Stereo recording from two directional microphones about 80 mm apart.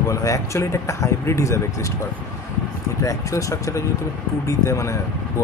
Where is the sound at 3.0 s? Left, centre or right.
Left.